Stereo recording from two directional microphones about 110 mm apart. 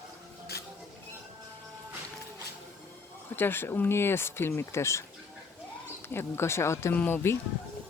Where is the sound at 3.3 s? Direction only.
20° left (ahead or behind).